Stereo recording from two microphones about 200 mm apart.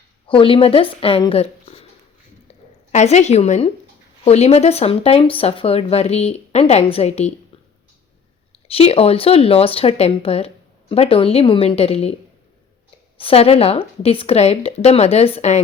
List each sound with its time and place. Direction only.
0.3 s speech: 25° left (ahead or behind)
8.6 s speech: 30° left (ahead or behind)
13.1 s speech: 30° left (ahead or behind)